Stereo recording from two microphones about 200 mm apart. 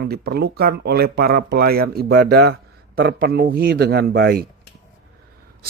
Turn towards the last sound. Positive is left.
turn(degrees=-50)  # may be behind; listen again after turning